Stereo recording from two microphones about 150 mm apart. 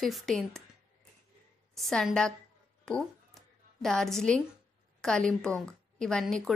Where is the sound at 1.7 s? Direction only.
Centre (ahead or behind).